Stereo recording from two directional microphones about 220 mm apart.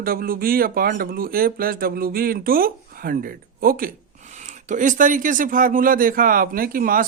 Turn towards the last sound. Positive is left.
turn(degrees=-40)  # may be behind; listen again after turning